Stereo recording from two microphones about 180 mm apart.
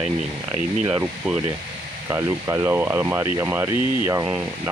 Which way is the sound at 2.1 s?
15° right (ahead or behind).